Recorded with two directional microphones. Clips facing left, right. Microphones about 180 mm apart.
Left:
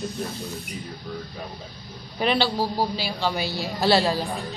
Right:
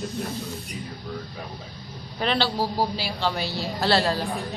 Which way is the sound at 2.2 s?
10° left (ahead or behind).